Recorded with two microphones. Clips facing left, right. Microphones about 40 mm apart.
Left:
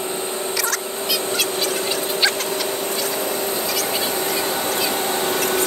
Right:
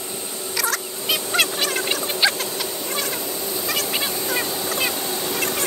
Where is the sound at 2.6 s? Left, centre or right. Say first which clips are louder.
Left 3 dB; left.